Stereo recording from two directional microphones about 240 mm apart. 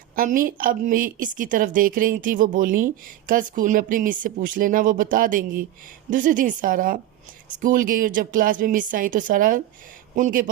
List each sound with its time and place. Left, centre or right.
0.2 s a woman's voice: right